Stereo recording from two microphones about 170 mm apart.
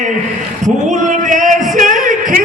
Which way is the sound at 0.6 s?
45° right (ahead or behind).